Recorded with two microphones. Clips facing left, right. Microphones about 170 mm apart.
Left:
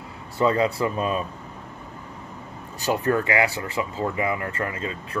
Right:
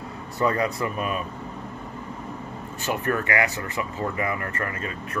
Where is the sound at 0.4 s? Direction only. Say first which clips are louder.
Left 3 dB; 25° left (ahead or behind).